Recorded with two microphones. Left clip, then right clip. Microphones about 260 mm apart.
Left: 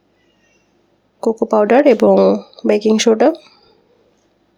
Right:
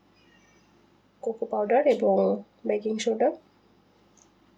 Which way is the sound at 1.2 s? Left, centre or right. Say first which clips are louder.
Left 14 dB; left.